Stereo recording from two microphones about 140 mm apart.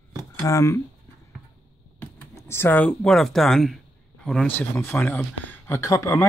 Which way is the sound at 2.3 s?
20° left (ahead or behind).